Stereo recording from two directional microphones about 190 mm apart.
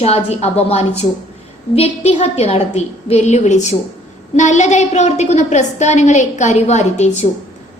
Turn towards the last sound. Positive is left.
turn(degrees=35)  # may be behind; listen again after turning